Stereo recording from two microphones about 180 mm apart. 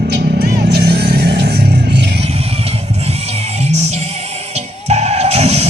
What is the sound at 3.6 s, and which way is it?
Music, 35° right (ahead or behind).